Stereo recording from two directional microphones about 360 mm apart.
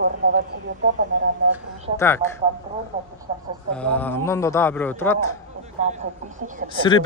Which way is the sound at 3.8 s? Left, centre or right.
Centre.